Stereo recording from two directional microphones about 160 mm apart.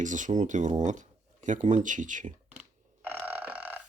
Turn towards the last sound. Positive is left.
turn(degrees=-10)  # may be behind; listen again after turning